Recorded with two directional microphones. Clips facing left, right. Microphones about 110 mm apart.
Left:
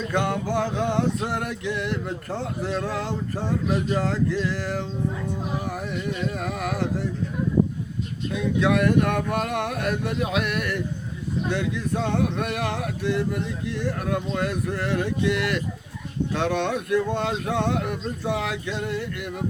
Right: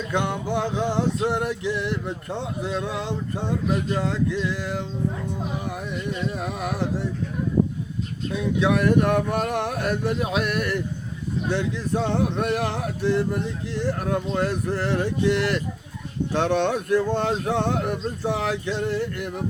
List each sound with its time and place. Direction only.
0.1 s music: 20° right (ahead or behind)
2.4 s speech: 15° right (ahead or behind)
4.5 s speech: 15° right (ahead or behind)
6.3 s music: 25° right (ahead or behind)
8.6 s a sound: 30° right (ahead or behind)